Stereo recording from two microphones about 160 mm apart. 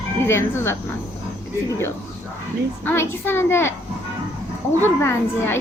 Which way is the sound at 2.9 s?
15° left (ahead or behind).